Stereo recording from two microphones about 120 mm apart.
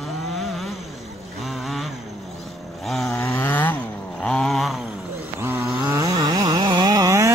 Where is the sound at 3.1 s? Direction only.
20° left (ahead or behind).